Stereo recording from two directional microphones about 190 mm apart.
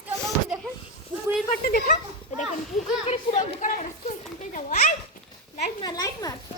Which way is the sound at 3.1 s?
40° left (ahead or behind).